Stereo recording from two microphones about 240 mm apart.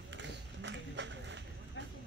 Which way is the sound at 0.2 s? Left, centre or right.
Right.